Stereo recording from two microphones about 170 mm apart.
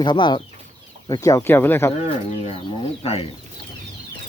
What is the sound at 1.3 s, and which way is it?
Speech, 15° left (ahead or behind).